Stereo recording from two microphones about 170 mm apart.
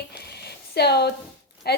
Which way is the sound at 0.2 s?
70° left (ahead or behind).